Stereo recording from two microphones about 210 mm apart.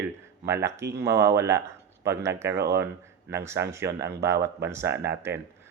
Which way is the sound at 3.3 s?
10° right (ahead or behind).